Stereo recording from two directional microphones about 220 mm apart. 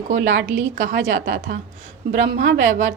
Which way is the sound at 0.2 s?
55° right (ahead or behind).